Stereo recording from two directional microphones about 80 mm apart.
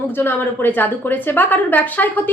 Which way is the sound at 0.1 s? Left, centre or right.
Left.